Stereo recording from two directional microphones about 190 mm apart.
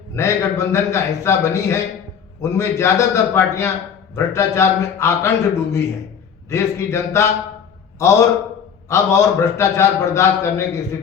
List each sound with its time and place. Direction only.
0.2 s a man's voice: 15° left (ahead or behind)